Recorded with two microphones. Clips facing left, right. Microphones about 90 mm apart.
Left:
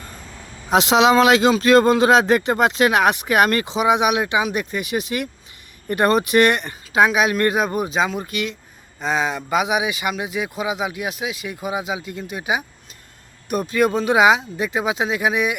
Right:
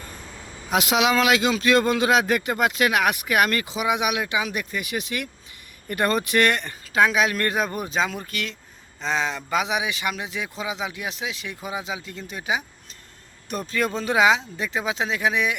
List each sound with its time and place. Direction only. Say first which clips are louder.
0.7 s speech: left 6 dB; 30° left (ahead or behind); by 15.5 s 10° left (ahead or behind)